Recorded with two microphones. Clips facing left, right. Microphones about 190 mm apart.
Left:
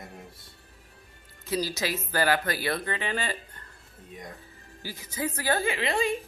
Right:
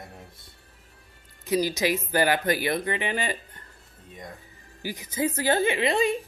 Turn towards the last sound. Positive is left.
turn(degrees=-20)  # may be behind; listen again after turning